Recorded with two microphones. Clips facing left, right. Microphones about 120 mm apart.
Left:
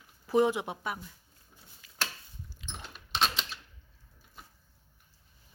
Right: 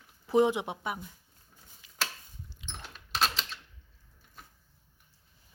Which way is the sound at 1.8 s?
15° right (ahead or behind).